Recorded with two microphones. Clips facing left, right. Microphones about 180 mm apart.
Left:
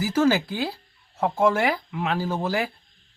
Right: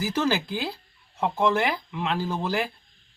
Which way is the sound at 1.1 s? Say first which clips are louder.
Left 2 dB; 45° left (ahead or behind).